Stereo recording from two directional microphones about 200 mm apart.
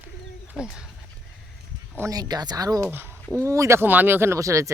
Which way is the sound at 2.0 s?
20° right (ahead or behind).